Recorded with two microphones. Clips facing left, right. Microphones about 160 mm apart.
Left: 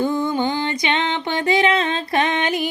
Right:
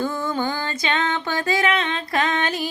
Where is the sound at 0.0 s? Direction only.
15° left (ahead or behind).